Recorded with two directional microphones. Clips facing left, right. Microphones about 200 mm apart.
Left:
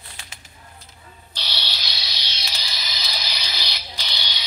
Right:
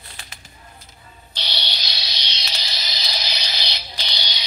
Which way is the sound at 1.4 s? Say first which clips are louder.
Right 2 dB; 20° right (ahead or behind).